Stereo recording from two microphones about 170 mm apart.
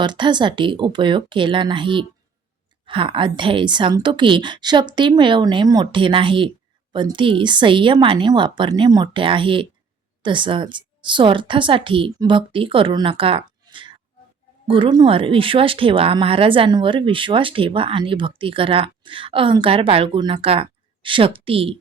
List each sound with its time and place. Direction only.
0.0 s a woman's voice: 25° right (ahead or behind)